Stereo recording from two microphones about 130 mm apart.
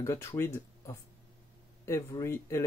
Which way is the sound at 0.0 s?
20° left (ahead or behind).